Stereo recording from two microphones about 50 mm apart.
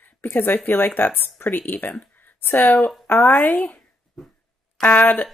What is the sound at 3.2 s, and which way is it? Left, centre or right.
Speech, left.